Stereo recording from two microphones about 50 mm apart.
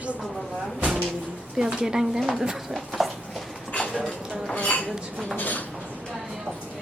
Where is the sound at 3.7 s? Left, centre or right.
Centre.